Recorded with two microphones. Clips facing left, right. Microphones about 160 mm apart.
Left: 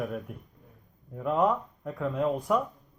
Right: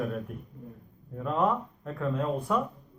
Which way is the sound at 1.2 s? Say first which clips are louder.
Left 2 dB; 15° left (ahead or behind).